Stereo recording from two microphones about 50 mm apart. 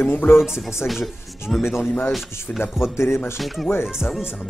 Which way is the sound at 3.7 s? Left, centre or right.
Left.